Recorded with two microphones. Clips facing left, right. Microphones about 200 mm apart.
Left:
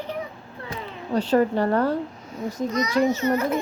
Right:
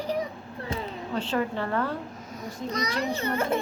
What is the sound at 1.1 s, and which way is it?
Speech, 40° left (ahead or behind).